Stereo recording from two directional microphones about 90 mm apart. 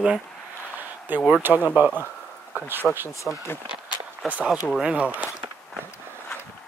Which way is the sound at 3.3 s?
5° left (ahead or behind).